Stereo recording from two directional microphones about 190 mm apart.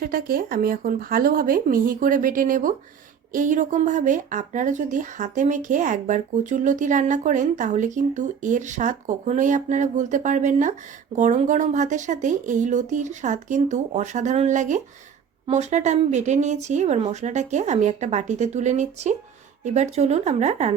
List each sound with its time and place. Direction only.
0.0 s speech: 50° right (ahead or behind)